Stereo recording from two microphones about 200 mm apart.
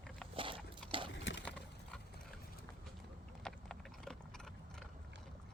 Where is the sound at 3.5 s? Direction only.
Centre (ahead or behind).